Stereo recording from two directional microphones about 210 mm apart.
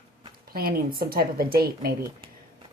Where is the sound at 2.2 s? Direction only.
25° right (ahead or behind).